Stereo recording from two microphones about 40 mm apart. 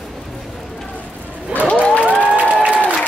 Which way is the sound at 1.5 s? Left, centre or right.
Left.